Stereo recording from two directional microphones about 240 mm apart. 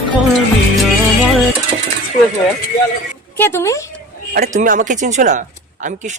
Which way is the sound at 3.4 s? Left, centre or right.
Centre.